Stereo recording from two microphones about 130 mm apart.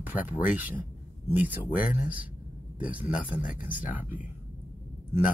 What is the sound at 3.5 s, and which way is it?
Speech, 90° left.